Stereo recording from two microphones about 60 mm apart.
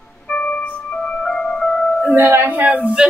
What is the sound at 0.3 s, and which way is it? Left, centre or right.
Music, centre.